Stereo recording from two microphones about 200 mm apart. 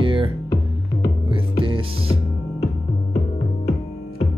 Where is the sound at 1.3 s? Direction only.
25° right (ahead or behind).